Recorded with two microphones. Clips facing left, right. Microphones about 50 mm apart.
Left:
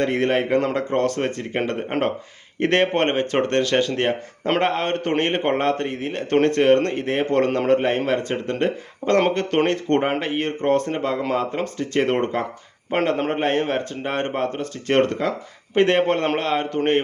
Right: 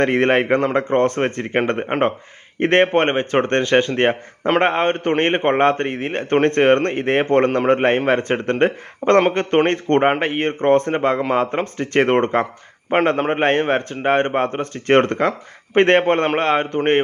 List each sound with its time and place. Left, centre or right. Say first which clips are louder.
0.0 s speech: right 4 dB; right
1.9 s speech: right 4 dB; right
13.1 s speech: right 4 dB; right
13.4 s speech: right 4 dB; right